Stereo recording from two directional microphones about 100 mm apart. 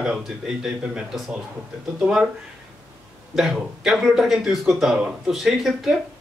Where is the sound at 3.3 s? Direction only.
Centre (ahead or behind).